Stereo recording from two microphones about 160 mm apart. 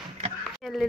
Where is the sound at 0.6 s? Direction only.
Centre (ahead or behind).